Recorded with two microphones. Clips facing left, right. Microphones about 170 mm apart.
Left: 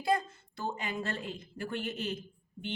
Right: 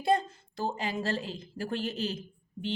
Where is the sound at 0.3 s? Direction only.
30° right (ahead or behind).